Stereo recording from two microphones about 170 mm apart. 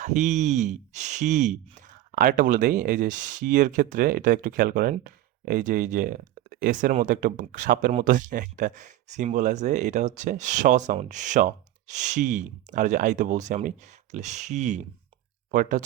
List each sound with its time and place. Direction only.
0.0 s speech: 45° right (ahead or behind)